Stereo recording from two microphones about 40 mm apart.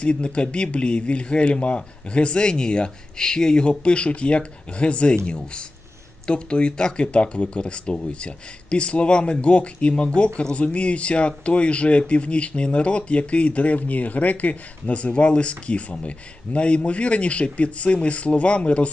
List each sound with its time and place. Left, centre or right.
0.0 s speech: left